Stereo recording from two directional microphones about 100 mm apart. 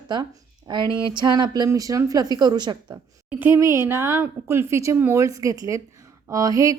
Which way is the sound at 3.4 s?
30° right (ahead or behind).